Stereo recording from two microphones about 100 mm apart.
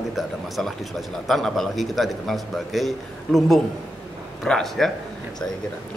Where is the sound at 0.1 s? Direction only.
Centre (ahead or behind).